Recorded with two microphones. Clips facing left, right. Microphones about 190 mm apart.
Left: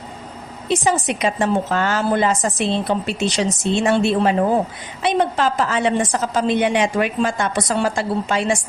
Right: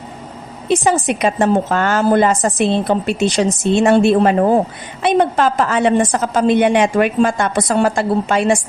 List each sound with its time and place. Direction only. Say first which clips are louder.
0.7 s a woman's voice: right 4 dB; 55° right (ahead or behind)